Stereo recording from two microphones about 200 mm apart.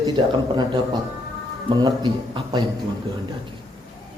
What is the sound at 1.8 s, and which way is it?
Speech, 25° right (ahead or behind).